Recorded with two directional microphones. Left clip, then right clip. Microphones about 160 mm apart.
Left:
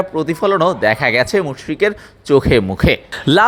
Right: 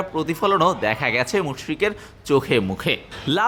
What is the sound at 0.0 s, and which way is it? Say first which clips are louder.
Speech: left 5 dB; 20° left (ahead or behind).